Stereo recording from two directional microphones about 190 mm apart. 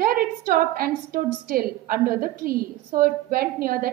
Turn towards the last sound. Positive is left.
turn(degrees=-50)  # may be behind; listen again after turning